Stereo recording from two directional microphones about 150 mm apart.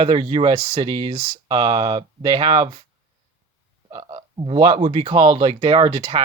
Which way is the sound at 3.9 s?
35° right (ahead or behind).